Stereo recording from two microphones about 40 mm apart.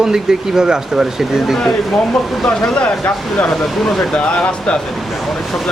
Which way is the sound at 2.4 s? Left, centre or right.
Left.